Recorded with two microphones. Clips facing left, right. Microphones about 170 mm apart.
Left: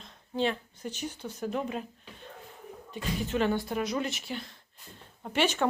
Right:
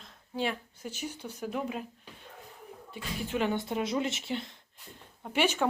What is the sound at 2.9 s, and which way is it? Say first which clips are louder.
Speech: left 3 dB; 10° right (ahead or behind).